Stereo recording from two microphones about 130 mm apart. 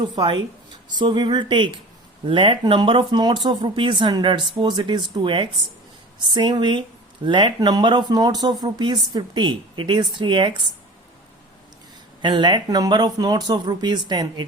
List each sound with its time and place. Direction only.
0.0 s speech: 40° right (ahead or behind)
12.2 s speech: 35° right (ahead or behind)